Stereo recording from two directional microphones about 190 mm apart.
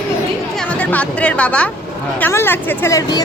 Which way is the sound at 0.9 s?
5° left (ahead or behind).